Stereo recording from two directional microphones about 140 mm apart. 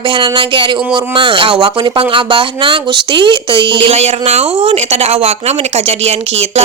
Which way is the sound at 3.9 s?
50° right (ahead or behind).